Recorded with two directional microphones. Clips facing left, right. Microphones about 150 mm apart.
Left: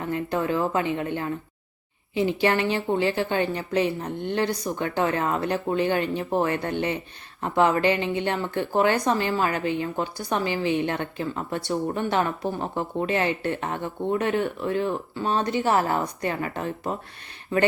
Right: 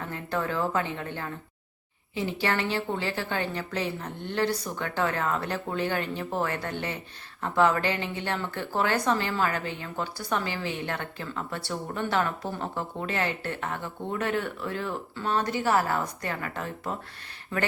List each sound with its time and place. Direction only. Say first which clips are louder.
0.0 s a woman's voice: left 5 dB; 15° left (ahead or behind)